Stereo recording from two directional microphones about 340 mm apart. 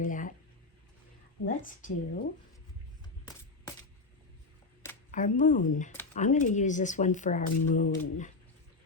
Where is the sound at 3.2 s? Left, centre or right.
Centre.